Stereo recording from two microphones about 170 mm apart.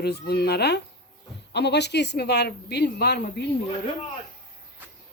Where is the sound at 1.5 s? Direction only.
85° left.